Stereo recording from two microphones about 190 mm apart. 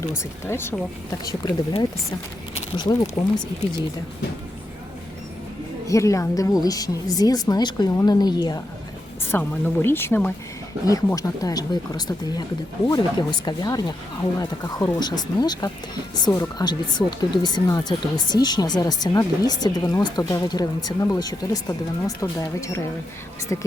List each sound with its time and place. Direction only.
0.2 s a woman's voice: 15° left (ahead or behind)
5.9 s speech: 15° left (ahead or behind)
9.2 s a woman's voice: 10° left (ahead or behind)